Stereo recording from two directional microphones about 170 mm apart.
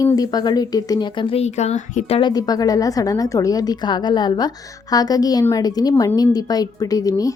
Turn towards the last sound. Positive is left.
turn(degrees=20)  # may be behind; listen again after turning